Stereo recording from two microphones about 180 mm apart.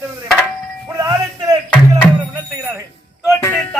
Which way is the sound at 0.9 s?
20° right (ahead or behind).